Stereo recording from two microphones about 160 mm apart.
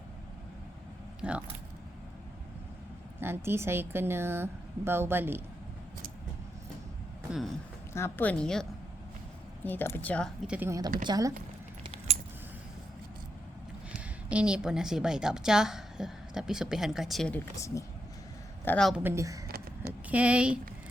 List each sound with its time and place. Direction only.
1.2 s speech: 5° right (ahead or behind)
3.2 s speech: 15° right (ahead or behind)
7.3 s speech: centre (ahead or behind)
7.9 s a woman's voice: 15° left (ahead or behind)
9.6 s a woman's voice: 10° left (ahead or behind)
10.4 s speech: 5° right (ahead or behind)
10.7 s speech: 25° right (ahead or behind)
14.3 s a woman's voice: 5° right (ahead or behind)
18.6 s speech: 10° left (ahead or behind)
18.9 s speech: 5° right (ahead or behind)
19.1 s speech: 20° right (ahead or behind)
19.5 s a sound: 70° right (ahead or behind)
20.1 s speech: 10° right (ahead or behind)